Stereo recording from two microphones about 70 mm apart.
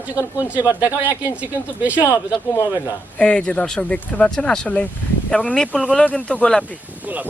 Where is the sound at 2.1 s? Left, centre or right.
Left.